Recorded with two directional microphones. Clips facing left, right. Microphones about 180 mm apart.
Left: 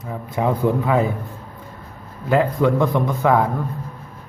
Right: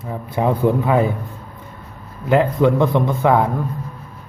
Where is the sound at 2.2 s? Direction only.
25° right (ahead or behind).